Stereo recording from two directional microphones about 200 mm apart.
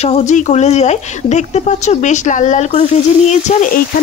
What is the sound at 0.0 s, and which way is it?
Speech, 35° left (ahead or behind).